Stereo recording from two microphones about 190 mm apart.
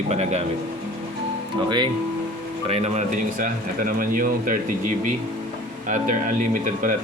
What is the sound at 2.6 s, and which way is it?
A man's voice, 35° right (ahead or behind).